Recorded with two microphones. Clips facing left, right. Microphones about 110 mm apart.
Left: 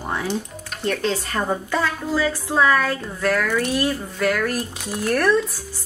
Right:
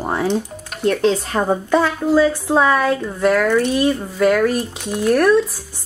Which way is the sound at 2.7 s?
10° right (ahead or behind).